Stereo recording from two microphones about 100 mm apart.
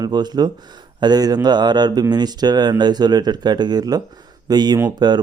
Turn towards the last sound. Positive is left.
turn(degrees=-45)  # may be behind; listen again after turning